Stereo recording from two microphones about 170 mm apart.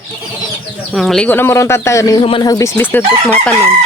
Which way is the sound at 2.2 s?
30° left (ahead or behind).